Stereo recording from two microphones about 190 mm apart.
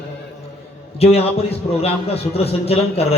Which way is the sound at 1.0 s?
30° left (ahead or behind).